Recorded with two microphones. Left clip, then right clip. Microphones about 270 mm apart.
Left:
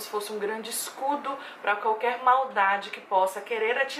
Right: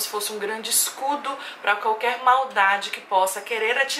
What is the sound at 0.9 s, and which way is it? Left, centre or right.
Speech, left.